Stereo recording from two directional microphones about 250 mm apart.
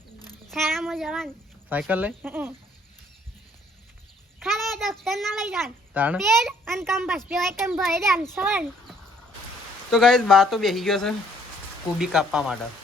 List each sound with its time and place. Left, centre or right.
0.2 s a sound: centre
0.5 s child singing: centre
1.7 s speech: centre
4.4 s a child's voice: centre